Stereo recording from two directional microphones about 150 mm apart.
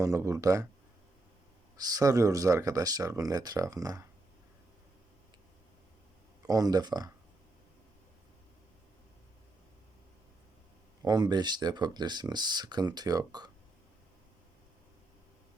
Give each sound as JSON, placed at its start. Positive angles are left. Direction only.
{"t": 0.0, "sound": "speech", "side_deg": -20}
{"t": 1.7, "sound": "speech", "side_deg": -25}
{"t": 6.4, "sound": "speech", "side_deg": -25}
{"t": 11.0, "sound": "speech", "side_deg": -30}